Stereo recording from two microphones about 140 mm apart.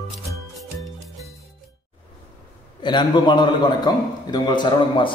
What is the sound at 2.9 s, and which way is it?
A man's voice, 35° left (ahead or behind).